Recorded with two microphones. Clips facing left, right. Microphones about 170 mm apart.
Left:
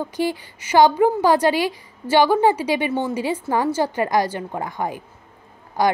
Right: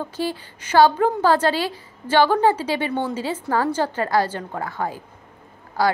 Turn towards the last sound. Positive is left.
turn(degrees=20)  # may be behind; listen again after turning